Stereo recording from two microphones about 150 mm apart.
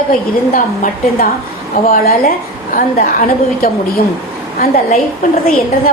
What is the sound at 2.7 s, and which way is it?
Speech, 65° left (ahead or behind).